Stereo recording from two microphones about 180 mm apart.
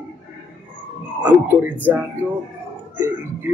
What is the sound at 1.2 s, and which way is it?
A man's voice, 10° right (ahead or behind).